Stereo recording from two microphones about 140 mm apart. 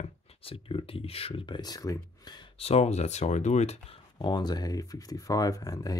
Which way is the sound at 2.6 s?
50° left (ahead or behind).